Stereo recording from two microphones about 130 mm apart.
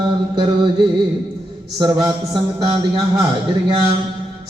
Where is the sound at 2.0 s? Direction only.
35° right (ahead or behind).